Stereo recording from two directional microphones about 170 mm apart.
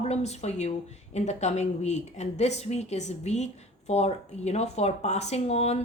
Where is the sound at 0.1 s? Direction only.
40° left (ahead or behind).